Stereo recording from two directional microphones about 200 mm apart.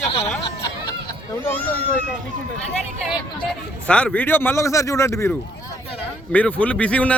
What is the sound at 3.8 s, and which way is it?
A man's voice, 5° left (ahead or behind).